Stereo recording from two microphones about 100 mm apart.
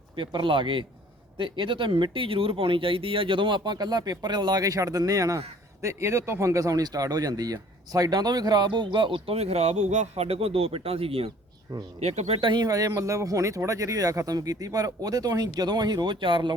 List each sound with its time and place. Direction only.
0.2 s speech: 55° right (ahead or behind); by 11.3 s 75° right (ahead or behind)
11.9 s speech: 90° right
12.5 s speech: 40° right (ahead or behind)